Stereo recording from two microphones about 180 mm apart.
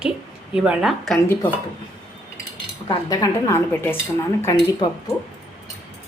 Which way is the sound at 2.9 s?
20° left (ahead or behind).